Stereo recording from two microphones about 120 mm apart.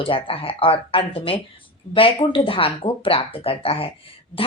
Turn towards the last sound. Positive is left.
turn(degrees=50)  # may be behind; listen again after turning